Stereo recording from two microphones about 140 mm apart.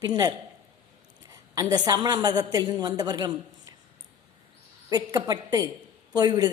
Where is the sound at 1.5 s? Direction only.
25° right (ahead or behind).